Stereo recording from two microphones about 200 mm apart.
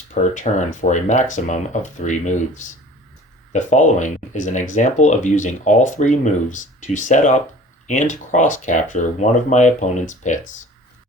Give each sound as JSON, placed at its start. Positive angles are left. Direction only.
{"t": 0.1, "sound": "speech", "side_deg": 40}
{"t": 3.5, "sound": "speech", "side_deg": 35}